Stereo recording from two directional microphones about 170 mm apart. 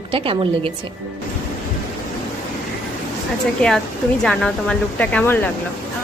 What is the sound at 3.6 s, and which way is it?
A woman's voice, 5° left (ahead or behind).